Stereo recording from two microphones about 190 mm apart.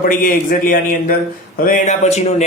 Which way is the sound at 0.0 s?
45° left (ahead or behind).